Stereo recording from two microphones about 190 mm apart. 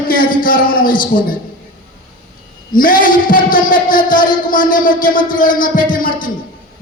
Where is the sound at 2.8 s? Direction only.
45° left (ahead or behind).